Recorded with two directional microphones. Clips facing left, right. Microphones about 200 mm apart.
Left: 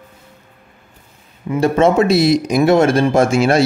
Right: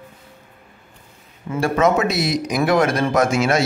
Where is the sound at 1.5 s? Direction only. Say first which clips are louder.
Left 4 dB; 20° left (ahead or behind).